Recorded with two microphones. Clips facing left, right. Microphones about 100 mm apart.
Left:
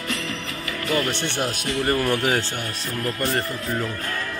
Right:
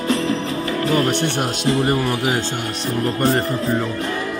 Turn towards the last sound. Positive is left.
turn(degrees=-30)  # may be behind; listen again after turning